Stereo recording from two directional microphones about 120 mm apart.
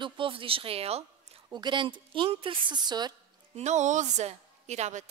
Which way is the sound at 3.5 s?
75° right (ahead or behind).